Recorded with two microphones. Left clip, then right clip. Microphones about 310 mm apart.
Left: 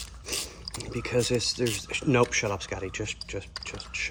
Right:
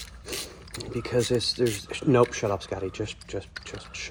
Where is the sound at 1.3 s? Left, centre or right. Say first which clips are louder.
Right 2 dB; centre.